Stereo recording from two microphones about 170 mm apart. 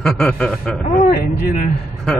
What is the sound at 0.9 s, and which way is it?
Speech, 60° left (ahead or behind).